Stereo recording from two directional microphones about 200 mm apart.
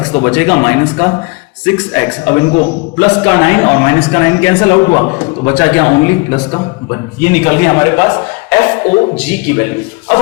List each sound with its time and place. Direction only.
0.1 s speech: 25° left (ahead or behind)
0.3 s a man's voice: 15° left (ahead or behind)
8.8 s speech: 25° left (ahead or behind)